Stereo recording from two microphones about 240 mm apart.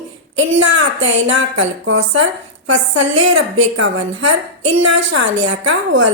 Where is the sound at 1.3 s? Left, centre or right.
Right.